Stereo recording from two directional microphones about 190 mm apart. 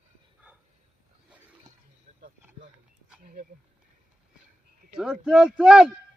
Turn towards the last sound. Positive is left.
turn(degrees=-5)  # may be behind; listen again after turning